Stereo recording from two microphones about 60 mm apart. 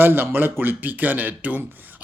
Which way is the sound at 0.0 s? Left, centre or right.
Right.